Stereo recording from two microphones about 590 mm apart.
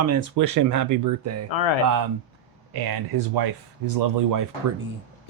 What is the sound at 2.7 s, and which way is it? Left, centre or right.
Speech, right.